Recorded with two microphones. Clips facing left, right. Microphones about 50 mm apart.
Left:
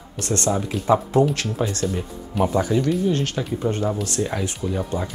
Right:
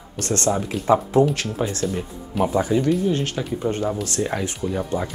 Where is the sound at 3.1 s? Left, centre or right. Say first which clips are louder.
Even; right.